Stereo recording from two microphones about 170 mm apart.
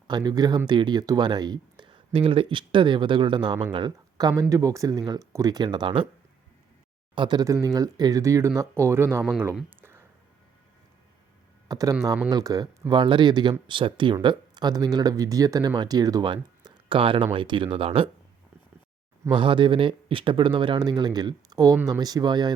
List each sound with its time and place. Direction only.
0.1 s speech: 25° right (ahead or behind)
7.2 s speech: 25° right (ahead or behind)
9.6 s a sound: 10° right (ahead or behind)
11.7 s speech: 20° right (ahead or behind)
19.3 s speech: 30° right (ahead or behind)